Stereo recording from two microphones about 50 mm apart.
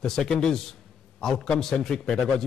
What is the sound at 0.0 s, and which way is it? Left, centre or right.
A man's voice, centre.